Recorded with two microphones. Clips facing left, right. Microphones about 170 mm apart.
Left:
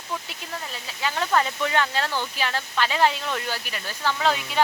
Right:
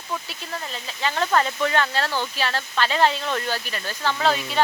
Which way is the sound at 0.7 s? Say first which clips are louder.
Right 2 dB; 10° left (ahead or behind).